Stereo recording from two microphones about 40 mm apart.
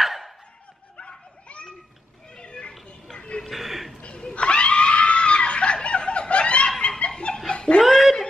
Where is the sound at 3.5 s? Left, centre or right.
Centre.